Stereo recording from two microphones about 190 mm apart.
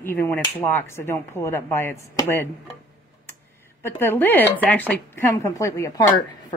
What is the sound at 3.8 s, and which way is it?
A woman's voice, 10° left (ahead or behind).